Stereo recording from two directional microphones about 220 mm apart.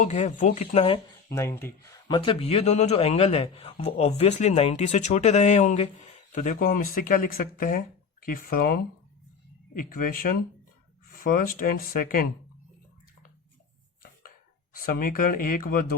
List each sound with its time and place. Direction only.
0.0 s speech: 30° left (ahead or behind)
1.3 s a man's voice: 10° left (ahead or behind); by 12.3 s 40° left (ahead or behind)
14.3 s speech: 40° left (ahead or behind)